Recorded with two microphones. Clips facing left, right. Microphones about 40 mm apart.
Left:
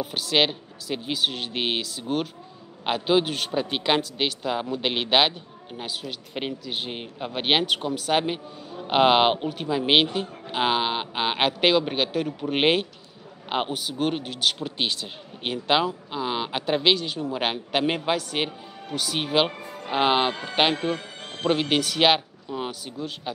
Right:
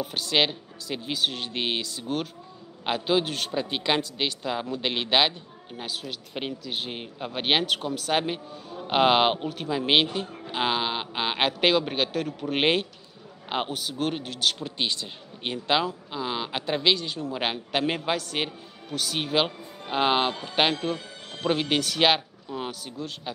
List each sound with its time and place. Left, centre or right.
0.0 s a man's voice: centre
19.6 s music: left
19.9 s a man's voice: centre